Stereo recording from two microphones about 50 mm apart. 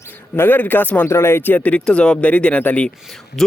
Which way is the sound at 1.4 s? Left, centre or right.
Left.